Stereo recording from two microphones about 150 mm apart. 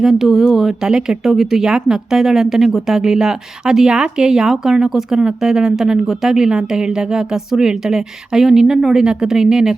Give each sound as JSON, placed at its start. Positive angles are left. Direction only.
{"t": 0.0, "sound": "speech", "side_deg": 0}